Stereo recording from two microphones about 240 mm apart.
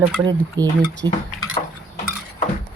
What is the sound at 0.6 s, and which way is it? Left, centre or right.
Speech, centre.